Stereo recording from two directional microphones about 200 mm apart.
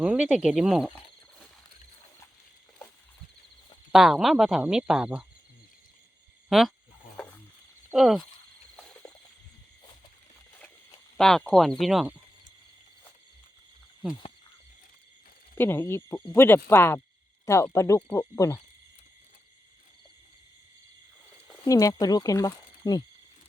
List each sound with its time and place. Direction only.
0.0 s cricket: 5° right (ahead or behind)
3.9 s speech: centre (ahead or behind)
6.5 s speech: centre (ahead or behind)
7.9 s speech: centre (ahead or behind)
8.7 s a sound: 5° left (ahead or behind)
11.2 s speech: centre (ahead or behind)
15.5 s speech: 10° left (ahead or behind)
21.6 s speech: 15° left (ahead or behind)